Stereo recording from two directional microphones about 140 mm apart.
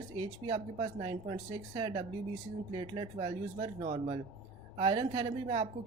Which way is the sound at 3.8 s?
55° right (ahead or behind).